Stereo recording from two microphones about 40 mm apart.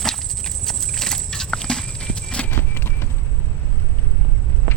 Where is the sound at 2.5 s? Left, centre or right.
Left.